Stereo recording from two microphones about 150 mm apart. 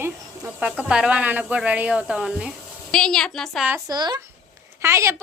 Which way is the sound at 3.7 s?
20° right (ahead or behind).